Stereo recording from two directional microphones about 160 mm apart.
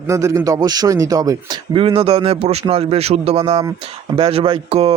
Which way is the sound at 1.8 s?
35° right (ahead or behind).